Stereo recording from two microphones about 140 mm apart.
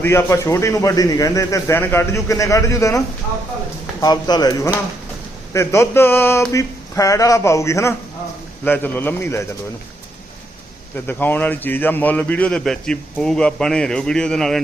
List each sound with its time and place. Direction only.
0.0 s a man's voice: 20° left (ahead or behind)
4.0 s a man's voice: 30° left (ahead or behind); by 9.4 s 15° left (ahead or behind)
11.0 s a man's voice: 15° left (ahead or behind)